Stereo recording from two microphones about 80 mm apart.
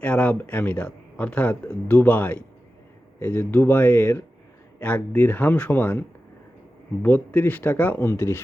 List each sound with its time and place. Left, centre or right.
0.0 s speech: centre